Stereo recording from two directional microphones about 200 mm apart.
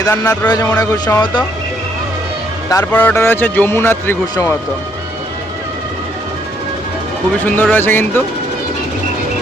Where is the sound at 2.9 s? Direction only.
10° left (ahead or behind).